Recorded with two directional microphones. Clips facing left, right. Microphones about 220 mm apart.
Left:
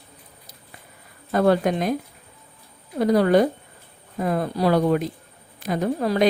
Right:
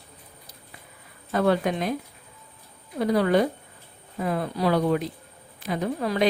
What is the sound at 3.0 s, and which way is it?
A woman's voice, 40° left (ahead or behind).